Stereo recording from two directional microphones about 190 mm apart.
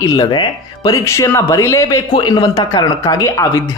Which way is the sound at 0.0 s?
20° left (ahead or behind).